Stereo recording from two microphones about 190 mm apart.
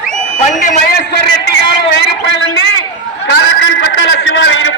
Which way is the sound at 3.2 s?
65° left (ahead or behind).